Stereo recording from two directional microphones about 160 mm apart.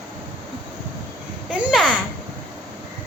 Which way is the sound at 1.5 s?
5° right (ahead or behind).